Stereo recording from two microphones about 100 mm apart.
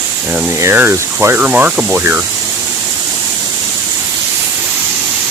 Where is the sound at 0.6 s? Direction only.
20° right (ahead or behind).